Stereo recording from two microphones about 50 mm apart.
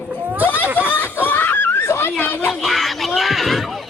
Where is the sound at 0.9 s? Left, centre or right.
Left.